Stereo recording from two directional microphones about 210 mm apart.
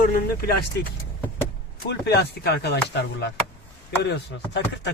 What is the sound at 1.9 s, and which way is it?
Speech, 50° left (ahead or behind).